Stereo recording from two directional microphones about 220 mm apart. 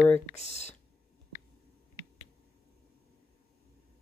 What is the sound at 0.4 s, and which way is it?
Speech, 30° left (ahead or behind).